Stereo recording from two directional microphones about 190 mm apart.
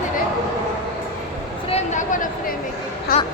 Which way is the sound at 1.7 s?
35° left (ahead or behind).